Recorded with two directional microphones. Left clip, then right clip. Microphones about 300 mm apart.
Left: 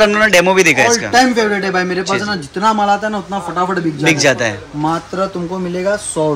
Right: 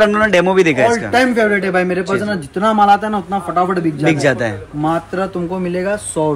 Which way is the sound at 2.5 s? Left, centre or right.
Centre.